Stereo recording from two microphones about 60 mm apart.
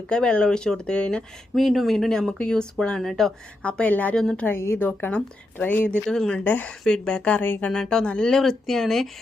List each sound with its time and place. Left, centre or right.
0.1 s speech: centre
1.5 s speech: centre
3.6 s speech: left
4.1 s speech: centre
4.4 s a woman's voice: left
6.1 s speech: centre
6.3 s speech: left
6.8 s speech: centre
7.7 s speech: centre